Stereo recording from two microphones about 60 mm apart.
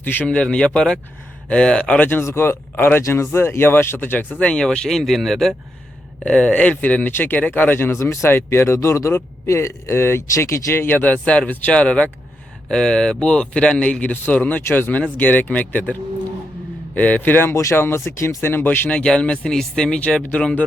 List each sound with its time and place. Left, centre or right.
0.0 s speech: left
0.3 s speech: centre
2.0 s speech: left
4.4 s speech: centre
6.2 s speech: centre; by 10.8 s left
10.8 s speech: left
17.5 s speech: left
17.7 s speech: left
18.4 s speech: left
19.0 s speech: centre